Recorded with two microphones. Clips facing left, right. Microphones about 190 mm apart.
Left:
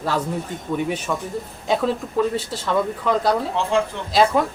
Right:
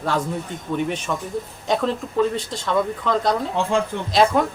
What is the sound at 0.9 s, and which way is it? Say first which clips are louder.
Speech: left 1 dB; 5° left (ahead or behind).